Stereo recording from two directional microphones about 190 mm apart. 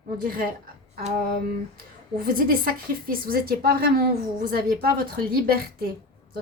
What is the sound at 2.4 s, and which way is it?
Speech, 50° right (ahead or behind).